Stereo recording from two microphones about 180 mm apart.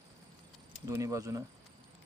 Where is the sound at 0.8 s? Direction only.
15° right (ahead or behind).